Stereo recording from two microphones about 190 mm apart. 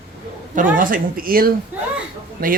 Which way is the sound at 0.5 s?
45° right (ahead or behind).